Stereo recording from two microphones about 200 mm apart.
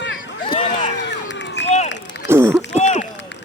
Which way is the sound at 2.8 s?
35° left (ahead or behind).